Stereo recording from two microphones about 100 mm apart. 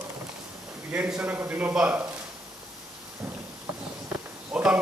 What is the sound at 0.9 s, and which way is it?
A man's voice, 10° right (ahead or behind).